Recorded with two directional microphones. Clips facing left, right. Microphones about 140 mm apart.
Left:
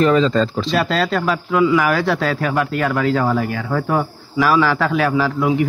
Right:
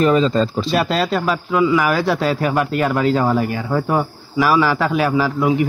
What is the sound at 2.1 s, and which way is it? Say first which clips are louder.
Speech: right 1 dB; 15° right (ahead or behind).